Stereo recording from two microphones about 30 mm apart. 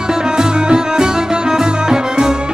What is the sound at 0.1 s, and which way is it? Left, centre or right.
Music, right.